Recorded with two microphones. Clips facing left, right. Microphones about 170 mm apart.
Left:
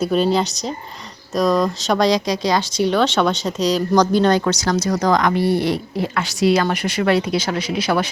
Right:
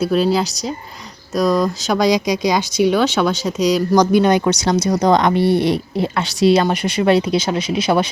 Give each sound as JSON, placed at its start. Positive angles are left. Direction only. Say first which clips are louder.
{"t": 0.1, "sound": "speech", "louder": "right 1 dB", "side_deg": -5}
{"t": 5.1, "sound": "a woman's voice", "louder": "right 2 dB", "side_deg": -25}